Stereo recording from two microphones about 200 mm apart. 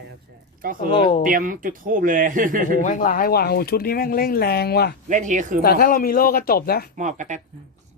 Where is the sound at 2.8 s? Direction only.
40° left (ahead or behind).